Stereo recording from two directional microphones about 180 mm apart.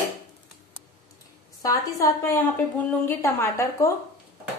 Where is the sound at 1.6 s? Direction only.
15° left (ahead or behind).